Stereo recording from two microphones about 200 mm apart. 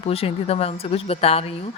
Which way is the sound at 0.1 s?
30° left (ahead or behind).